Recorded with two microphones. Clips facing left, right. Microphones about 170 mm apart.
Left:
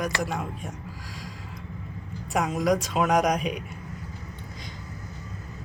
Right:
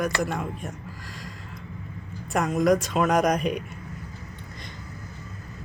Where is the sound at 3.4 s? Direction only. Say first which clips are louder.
Right 3 dB; 55° right (ahead or behind).